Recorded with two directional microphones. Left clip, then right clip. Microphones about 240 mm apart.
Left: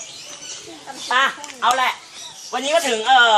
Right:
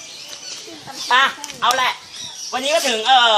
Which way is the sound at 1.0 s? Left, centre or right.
Right.